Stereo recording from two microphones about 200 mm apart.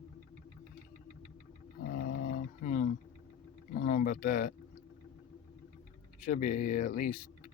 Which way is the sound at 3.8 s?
45° left (ahead or behind).